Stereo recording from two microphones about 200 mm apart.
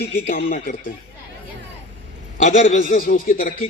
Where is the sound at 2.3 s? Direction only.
40° left (ahead or behind).